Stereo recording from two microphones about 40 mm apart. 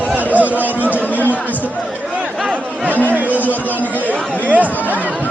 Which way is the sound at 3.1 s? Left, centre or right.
Right.